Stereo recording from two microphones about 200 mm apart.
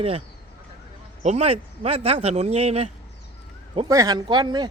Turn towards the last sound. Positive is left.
turn(degrees=-20)  # may be behind; listen again after turning